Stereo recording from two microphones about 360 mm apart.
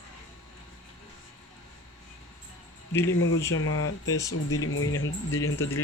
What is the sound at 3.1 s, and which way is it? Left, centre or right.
Speech, left.